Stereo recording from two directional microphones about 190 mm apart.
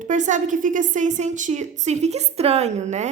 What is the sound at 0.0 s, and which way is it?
A woman's voice, 40° right (ahead or behind).